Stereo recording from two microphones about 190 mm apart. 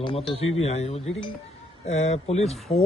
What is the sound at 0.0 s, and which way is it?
Speech, 25° left (ahead or behind).